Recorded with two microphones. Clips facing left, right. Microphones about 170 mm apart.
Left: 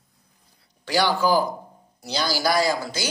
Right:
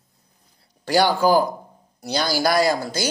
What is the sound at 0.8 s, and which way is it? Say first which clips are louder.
Speech: right 4 dB; 45° right (ahead or behind).